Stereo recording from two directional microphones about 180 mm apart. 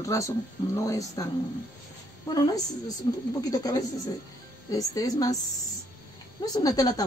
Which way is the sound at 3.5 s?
20° left (ahead or behind).